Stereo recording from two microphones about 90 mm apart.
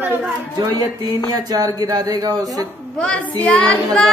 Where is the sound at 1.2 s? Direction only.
45° right (ahead or behind).